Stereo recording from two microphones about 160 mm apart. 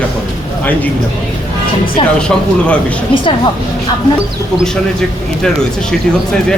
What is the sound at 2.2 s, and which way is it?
Speech, 5° left (ahead or behind).